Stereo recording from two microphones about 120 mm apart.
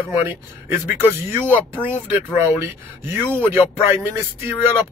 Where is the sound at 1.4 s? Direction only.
15° right (ahead or behind).